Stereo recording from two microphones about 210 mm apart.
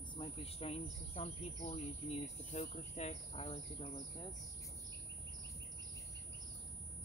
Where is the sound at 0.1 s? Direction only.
25° left (ahead or behind).